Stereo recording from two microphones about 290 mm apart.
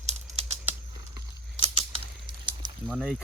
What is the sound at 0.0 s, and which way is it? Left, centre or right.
Typewriter, right.